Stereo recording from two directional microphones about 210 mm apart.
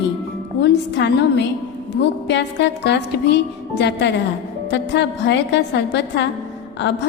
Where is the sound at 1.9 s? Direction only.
55° left (ahead or behind).